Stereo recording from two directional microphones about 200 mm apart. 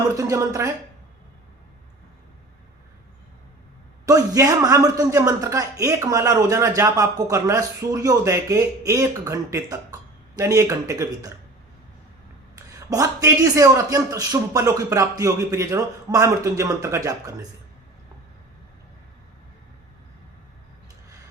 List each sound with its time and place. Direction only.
0.2 s a man's voice: 15° right (ahead or behind)
4.0 s a man's voice: 15° right (ahead or behind)
12.5 s a man's voice: 15° right (ahead or behind)